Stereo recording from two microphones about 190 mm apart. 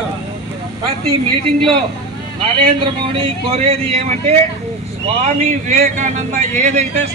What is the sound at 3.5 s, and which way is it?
Speech, 30° right (ahead or behind).